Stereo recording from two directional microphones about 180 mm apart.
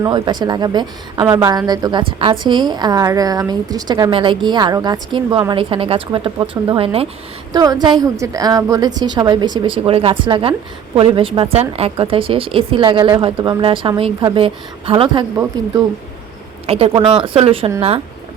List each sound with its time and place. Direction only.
0.0 s a woman's voice: 25° right (ahead or behind)
7.5 s a woman's voice: 20° right (ahead or behind)
16.6 s speech: 30° right (ahead or behind)